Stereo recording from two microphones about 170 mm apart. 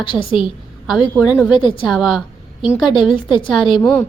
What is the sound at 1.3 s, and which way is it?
Speech, 10° right (ahead or behind).